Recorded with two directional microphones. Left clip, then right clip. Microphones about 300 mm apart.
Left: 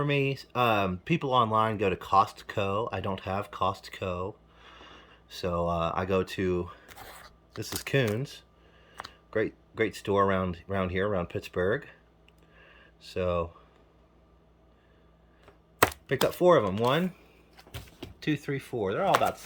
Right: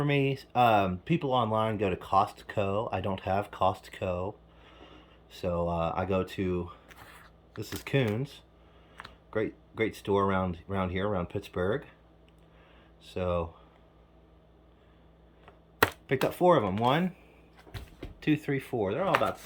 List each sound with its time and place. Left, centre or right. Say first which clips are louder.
0.0 s speech: even; centre
7.9 s speech: left 2 dB; centre
9.3 s speech: left 2 dB; centre
12.6 s a sound: left 4 dB; centre
16.0 s speech: left 2 dB; centre
16.4 s speech: left 2 dB; left
16.8 s speech: even; centre
18.2 s speech: right 2 dB; centre